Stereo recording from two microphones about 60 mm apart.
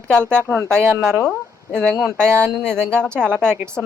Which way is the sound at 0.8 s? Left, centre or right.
Right.